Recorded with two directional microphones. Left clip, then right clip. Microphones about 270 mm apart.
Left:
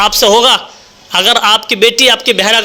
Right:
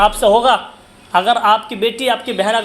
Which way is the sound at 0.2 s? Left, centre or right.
Left.